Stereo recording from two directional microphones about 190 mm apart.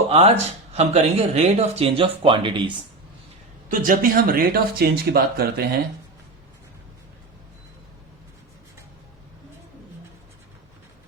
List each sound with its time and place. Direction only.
0.1 s speech: 35° right (ahead or behind)
3.7 s speech: 50° right (ahead or behind)